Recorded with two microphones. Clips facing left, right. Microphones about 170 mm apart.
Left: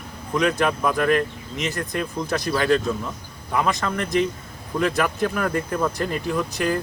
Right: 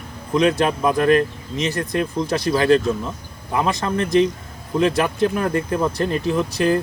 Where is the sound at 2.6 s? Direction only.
30° right (ahead or behind).